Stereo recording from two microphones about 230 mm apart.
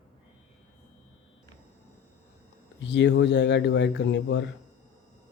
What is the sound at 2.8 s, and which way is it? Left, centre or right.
Speech, left.